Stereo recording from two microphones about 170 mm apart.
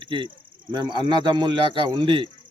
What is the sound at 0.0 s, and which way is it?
Speech, 30° right (ahead or behind).